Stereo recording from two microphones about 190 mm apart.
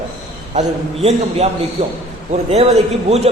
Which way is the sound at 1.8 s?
30° right (ahead or behind).